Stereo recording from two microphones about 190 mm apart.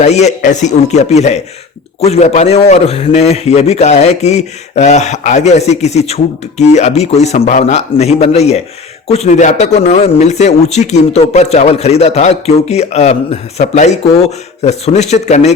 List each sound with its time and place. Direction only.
0.0 s a man's voice: 35° left (ahead or behind)